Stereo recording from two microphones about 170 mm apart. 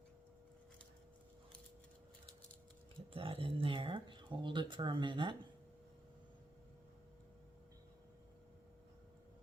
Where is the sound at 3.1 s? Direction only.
30° right (ahead or behind).